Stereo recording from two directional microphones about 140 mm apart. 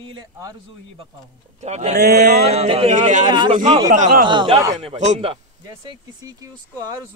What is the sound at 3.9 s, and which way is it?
Speech, 70° right (ahead or behind).